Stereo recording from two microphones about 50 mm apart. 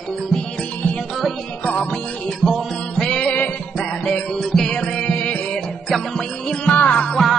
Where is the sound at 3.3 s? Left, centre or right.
Left.